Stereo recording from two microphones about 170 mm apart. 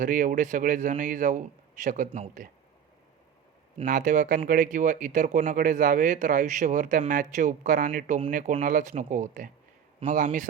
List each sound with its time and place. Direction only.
0.0 s speech: 50° right (ahead or behind)
3.8 s speech: 50° right (ahead or behind)